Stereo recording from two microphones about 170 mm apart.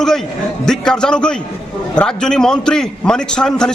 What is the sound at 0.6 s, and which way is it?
A man's voice, 5° left (ahead or behind).